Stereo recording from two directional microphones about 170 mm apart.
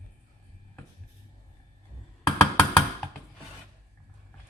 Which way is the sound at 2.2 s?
5° left (ahead or behind).